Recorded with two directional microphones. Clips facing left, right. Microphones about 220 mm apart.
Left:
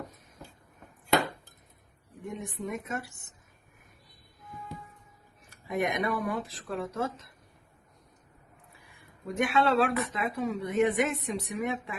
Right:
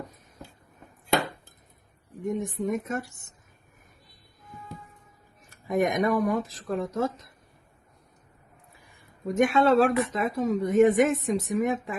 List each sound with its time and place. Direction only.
2.3 s a woman's voice: 45° right (ahead or behind)
5.6 s a woman's voice: 45° right (ahead or behind)
9.2 s a woman's voice: 45° right (ahead or behind)